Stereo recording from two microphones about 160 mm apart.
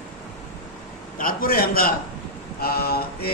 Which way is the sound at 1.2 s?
65° left (ahead or behind).